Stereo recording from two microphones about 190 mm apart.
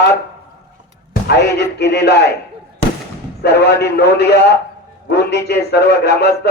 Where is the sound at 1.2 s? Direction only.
60° left (ahead or behind).